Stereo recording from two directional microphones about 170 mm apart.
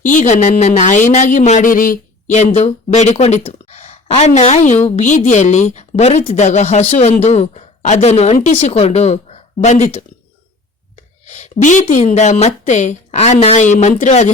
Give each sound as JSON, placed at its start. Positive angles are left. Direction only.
{"t": 0.0, "sound": "speech", "side_deg": 50}
{"t": 11.3, "sound": "speech", "side_deg": 40}